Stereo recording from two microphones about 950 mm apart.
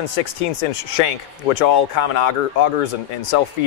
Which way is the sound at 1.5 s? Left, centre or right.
Left.